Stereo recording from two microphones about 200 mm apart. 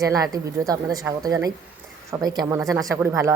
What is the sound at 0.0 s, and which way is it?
A woman's voice, 15° right (ahead or behind).